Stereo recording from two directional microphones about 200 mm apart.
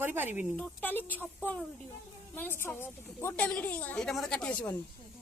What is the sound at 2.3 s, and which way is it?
A woman's voice, 10° left (ahead or behind).